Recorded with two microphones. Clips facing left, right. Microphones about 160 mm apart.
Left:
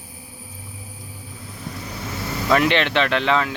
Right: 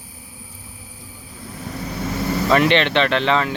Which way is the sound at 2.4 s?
Centre (ahead or behind).